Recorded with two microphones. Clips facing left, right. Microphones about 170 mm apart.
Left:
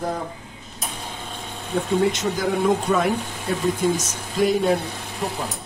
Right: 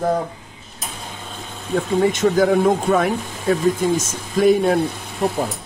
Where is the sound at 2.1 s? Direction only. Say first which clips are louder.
Right 8 dB; 50° right (ahead or behind).